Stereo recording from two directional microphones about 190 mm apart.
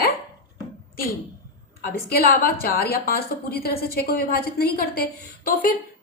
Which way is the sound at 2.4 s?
50° left (ahead or behind).